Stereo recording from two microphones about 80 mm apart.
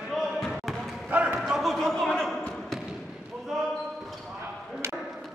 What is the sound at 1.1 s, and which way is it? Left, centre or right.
Basketball bounce, right.